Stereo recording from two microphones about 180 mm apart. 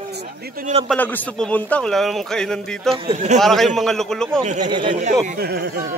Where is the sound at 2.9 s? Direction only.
35° right (ahead or behind).